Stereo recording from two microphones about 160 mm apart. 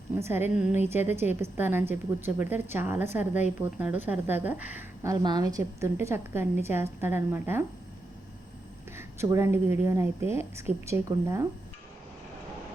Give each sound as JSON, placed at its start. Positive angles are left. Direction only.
{"t": 0.2, "sound": "a woman's voice", "side_deg": -15}
{"t": 5.2, "sound": "a woman's voice", "side_deg": -25}
{"t": 9.0, "sound": "a woman's voice", "side_deg": -15}